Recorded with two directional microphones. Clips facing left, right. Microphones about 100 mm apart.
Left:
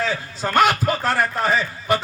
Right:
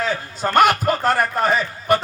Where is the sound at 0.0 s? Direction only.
50° right (ahead or behind).